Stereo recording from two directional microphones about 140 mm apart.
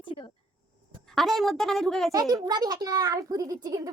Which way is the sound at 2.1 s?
25° right (ahead or behind).